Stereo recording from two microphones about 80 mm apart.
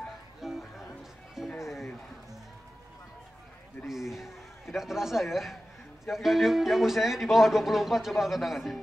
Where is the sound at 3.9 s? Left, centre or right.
Centre.